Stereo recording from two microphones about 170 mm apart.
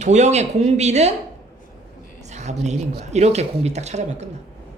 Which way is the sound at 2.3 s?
40° right (ahead or behind).